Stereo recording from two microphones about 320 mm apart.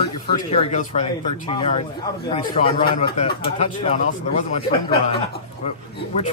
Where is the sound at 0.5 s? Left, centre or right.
Centre.